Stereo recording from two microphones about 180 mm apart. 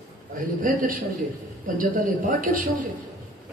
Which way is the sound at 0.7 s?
50° right (ahead or behind).